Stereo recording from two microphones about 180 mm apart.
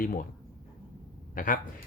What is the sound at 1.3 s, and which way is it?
Speech, 50° left (ahead or behind).